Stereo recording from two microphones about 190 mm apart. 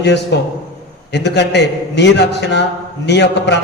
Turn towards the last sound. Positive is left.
turn(degrees=65)  # may be behind; listen again after turning